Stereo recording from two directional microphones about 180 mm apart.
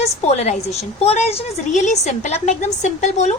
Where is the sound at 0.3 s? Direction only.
35° left (ahead or behind).